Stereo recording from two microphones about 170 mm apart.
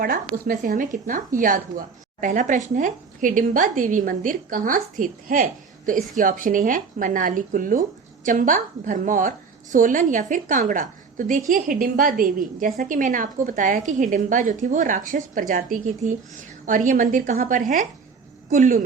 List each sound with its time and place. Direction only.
0.0 s a woman's voice: 55° right (ahead or behind)